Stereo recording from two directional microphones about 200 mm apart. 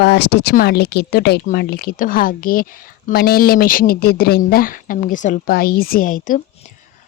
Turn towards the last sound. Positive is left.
turn(degrees=40)  # may be behind; listen again after turning